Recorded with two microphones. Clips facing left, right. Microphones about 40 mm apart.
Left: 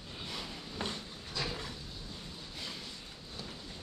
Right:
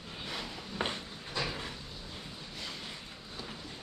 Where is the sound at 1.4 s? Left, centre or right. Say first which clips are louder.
Right 1 dB; centre.